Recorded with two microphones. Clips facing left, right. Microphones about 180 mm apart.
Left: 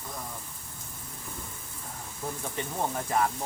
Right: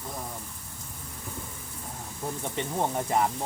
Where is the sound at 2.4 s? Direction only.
25° right (ahead or behind).